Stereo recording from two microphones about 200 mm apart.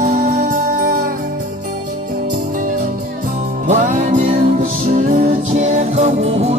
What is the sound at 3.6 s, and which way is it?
Music, 35° right (ahead or behind).